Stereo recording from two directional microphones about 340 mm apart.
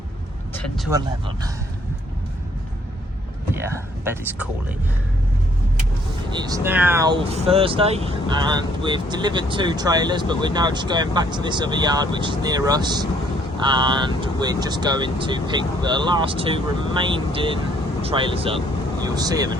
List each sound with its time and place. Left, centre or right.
0.9 s speech: centre
3.5 s speech: centre
6.3 s speech: centre